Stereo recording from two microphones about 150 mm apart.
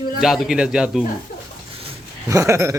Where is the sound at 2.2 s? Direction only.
20° right (ahead or behind).